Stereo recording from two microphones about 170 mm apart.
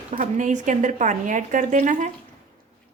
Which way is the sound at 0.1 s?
45° right (ahead or behind).